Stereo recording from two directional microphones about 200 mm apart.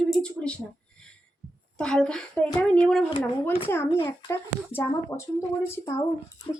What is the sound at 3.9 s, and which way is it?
A child's voice, 15° left (ahead or behind).